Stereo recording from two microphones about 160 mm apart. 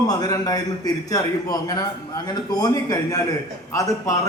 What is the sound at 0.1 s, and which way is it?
A man's voice, 25° left (ahead or behind).